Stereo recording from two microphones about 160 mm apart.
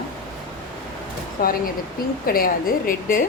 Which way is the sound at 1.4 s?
65° left (ahead or behind).